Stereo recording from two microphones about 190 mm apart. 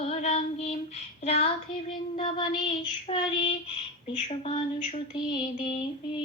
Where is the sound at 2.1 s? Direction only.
25° left (ahead or behind).